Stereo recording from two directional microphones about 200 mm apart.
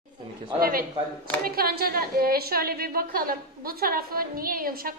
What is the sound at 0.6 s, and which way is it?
A woman's voice, 45° right (ahead or behind).